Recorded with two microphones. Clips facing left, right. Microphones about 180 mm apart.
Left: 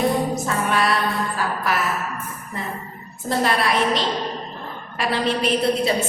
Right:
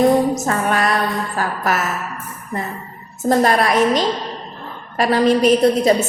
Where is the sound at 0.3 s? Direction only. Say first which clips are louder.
Right 3 dB; 45° right (ahead or behind).